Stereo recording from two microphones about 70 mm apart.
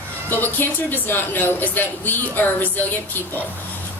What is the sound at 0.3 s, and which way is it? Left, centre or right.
Speech, left.